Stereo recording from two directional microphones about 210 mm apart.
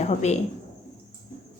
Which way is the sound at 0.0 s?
30° left (ahead or behind).